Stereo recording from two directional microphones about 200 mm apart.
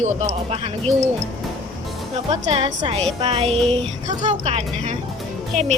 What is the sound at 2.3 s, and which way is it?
Speech, 30° right (ahead or behind).